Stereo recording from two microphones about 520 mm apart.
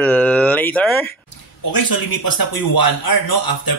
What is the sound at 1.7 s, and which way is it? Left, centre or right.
A man's voice, left.